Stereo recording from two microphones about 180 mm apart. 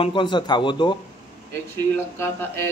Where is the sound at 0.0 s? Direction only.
25° left (ahead or behind).